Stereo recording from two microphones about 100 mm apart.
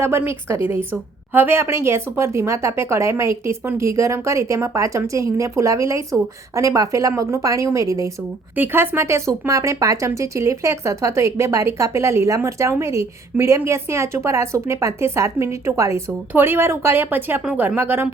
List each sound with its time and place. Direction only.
0.0 s a woman's voice: 25° right (ahead or behind)
8.5 s speech: 20° right (ahead or behind)